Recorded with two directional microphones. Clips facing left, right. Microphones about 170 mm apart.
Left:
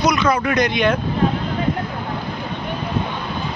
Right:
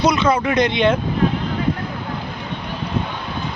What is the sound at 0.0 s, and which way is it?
Speech, 30° right (ahead or behind).